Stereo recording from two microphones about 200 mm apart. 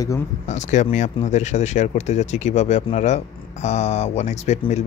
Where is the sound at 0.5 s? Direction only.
35° left (ahead or behind).